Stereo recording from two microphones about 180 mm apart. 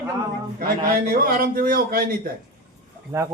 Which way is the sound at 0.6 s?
55° right (ahead or behind).